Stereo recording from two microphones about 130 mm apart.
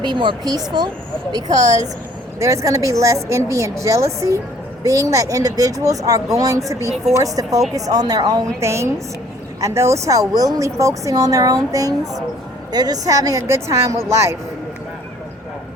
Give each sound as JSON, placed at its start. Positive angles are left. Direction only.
{"t": 0.0, "sound": "speech", "side_deg": -35}